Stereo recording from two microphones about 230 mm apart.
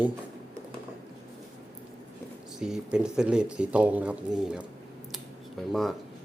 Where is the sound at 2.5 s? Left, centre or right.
Centre.